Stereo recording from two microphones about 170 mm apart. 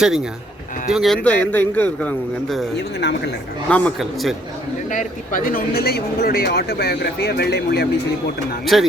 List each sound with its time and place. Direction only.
0.9 s a man's voice: centre (ahead or behind)
2.7 s a man's voice: 75° left (ahead or behind)
3.7 s a man's voice: 10° left (ahead or behind)
4.9 s a man's voice: 50° left (ahead or behind); by 7.9 s 70° left (ahead or behind)
8.6 s speech: centre (ahead or behind)